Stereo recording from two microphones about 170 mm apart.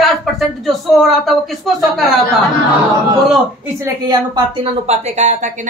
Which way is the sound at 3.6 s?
20° right (ahead or behind).